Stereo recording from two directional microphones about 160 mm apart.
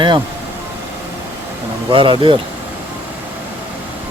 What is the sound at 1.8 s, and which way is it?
Speech, 30° right (ahead or behind).